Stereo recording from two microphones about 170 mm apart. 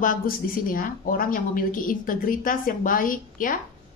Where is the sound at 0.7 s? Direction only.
55° left (ahead or behind).